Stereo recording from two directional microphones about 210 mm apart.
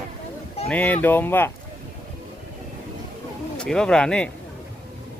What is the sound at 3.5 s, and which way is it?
Speech, 5° left (ahead or behind).